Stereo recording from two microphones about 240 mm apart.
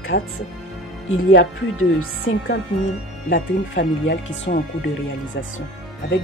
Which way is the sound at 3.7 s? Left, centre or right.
Left.